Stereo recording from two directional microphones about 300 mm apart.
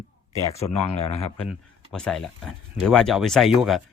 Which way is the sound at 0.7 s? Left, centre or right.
Left.